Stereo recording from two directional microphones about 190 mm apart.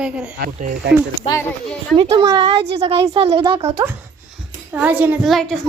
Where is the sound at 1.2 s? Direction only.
30° left (ahead or behind).